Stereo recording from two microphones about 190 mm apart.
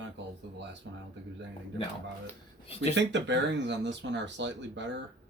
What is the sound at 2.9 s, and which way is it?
Speech, 70° right (ahead or behind).